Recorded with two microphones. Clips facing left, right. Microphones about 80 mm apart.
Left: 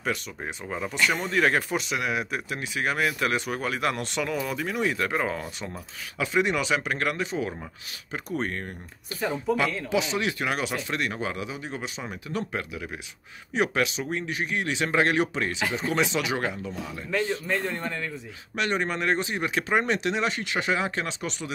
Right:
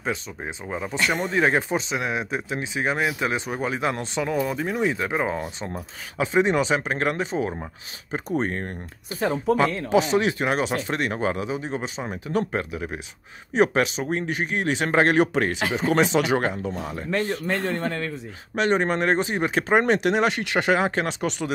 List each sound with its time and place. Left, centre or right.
0.4 s a man's voice: centre; by 8.6 s right
9.2 s speech: right
9.6 s a man's voice: right
18.6 s speech: right